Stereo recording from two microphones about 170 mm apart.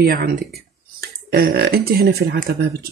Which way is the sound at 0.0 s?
65° right (ahead or behind).